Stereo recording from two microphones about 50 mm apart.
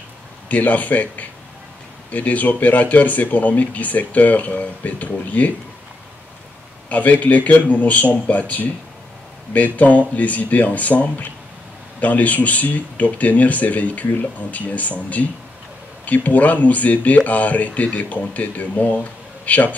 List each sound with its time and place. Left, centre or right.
0.5 s speech: left
6.9 s speech: left